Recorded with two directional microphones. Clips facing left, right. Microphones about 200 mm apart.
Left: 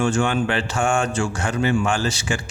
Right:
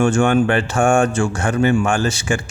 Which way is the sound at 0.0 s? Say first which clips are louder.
Right 6 dB; 50° right (ahead or behind).